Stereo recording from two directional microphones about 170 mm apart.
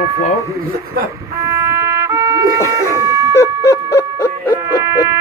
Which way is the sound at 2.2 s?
20° right (ahead or behind).